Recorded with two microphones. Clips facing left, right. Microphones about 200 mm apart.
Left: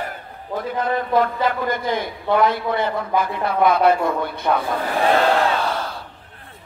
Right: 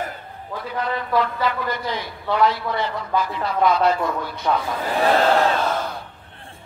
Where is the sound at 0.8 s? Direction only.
50° left (ahead or behind).